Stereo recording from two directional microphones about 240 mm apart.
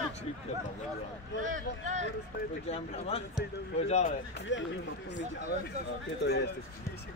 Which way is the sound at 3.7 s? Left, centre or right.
Left.